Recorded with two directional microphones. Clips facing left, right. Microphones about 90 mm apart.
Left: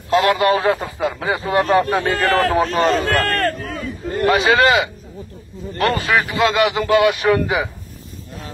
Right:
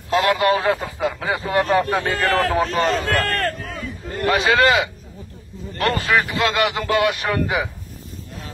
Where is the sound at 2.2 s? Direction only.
45° left (ahead or behind).